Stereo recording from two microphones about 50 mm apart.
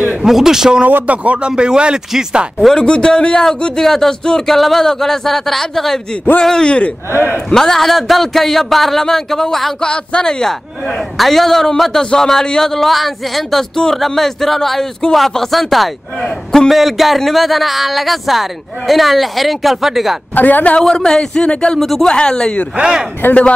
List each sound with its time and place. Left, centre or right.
0.1 s a man's voice: centre
0.8 s speech: right
2.7 s speech: centre
11.1 s speech: centre
20.3 s a man's voice: left
20.8 s speech: centre
21.7 s speech: centre
22.0 s speech: centre
23.2 s speech: left